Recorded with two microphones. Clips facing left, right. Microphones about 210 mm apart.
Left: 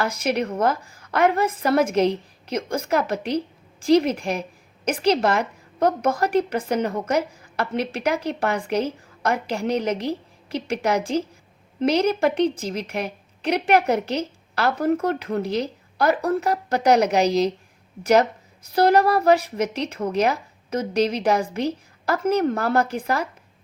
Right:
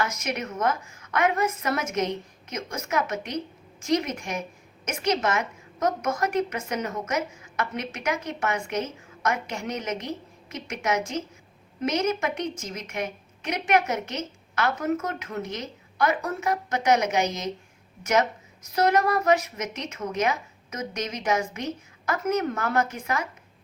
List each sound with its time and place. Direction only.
0.0 s a woman's voice: 30° left (ahead or behind)